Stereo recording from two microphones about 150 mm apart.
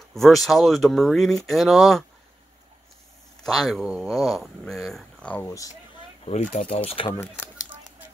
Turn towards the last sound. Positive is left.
turn(degrees=40)  # may be behind; listen again after turning